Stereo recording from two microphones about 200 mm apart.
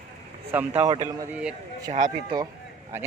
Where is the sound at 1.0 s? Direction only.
15° right (ahead or behind).